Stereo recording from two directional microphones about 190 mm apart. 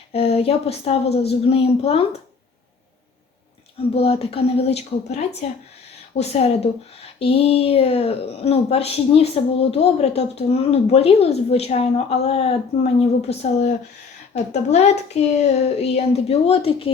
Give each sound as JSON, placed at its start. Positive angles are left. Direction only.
{"t": 0.1, "sound": "a woman's voice", "side_deg": 30}
{"t": 3.8, "sound": "a woman's voice", "side_deg": 30}
{"t": 14.5, "sound": "a woman's voice", "side_deg": 35}